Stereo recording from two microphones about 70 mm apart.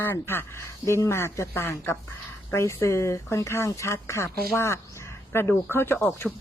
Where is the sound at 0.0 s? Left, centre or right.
Left.